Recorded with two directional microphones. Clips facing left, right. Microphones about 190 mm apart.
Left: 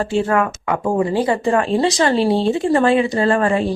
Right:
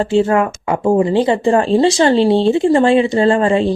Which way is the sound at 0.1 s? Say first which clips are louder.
Right 5 dB; 25° right (ahead or behind).